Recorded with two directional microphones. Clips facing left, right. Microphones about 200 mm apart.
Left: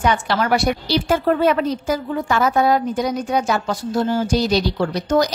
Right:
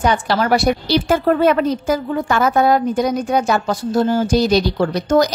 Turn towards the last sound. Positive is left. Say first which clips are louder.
# right 3 dB
turn(degrees=-50)  # may be behind; listen again after turning